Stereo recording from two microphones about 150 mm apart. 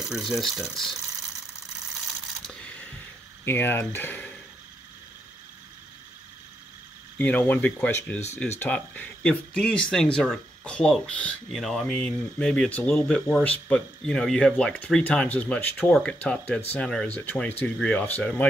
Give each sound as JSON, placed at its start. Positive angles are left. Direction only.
{"t": 0.0, "sound": "speech", "side_deg": 0}
{"t": 2.4, "sound": "coin", "side_deg": 10}
{"t": 3.4, "sound": "speech", "side_deg": 15}
{"t": 7.2, "sound": "speech", "side_deg": 10}